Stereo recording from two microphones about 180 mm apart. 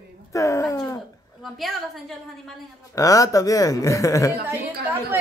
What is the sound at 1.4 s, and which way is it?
A woman's voice, centre (ahead or behind).